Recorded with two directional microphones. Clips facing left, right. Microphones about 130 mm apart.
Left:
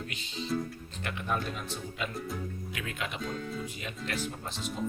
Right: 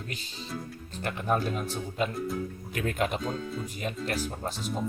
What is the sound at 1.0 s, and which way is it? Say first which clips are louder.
Speech: right 5 dB; 40° right (ahead or behind).